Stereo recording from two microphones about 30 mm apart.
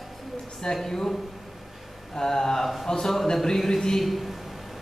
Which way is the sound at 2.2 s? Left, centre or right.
Centre.